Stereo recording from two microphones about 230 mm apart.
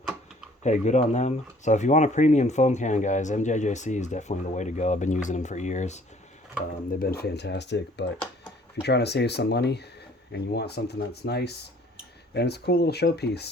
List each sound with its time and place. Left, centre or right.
0.6 s speech: left
7.0 s speech: left